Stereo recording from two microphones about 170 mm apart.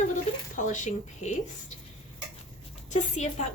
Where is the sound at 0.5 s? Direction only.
50° left (ahead or behind).